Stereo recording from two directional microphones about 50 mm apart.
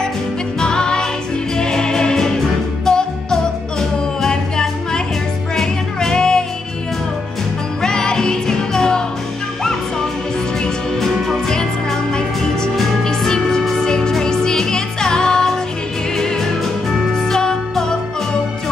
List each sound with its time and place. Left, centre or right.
0.6 s music: centre
7.8 s music: centre
11.4 s music: centre